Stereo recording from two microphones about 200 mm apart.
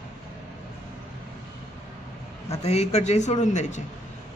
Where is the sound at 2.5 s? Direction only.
30° left (ahead or behind).